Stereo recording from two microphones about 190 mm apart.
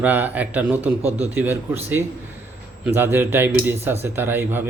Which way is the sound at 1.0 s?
35° right (ahead or behind).